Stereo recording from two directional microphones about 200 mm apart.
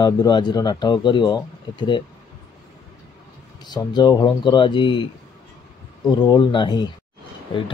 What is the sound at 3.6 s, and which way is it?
Speech, 20° left (ahead or behind).